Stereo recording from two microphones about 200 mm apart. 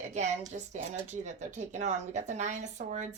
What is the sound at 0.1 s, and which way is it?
A woman's voice, 35° right (ahead or behind).